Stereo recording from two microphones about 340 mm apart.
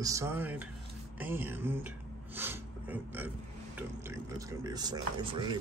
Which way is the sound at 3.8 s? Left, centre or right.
Centre.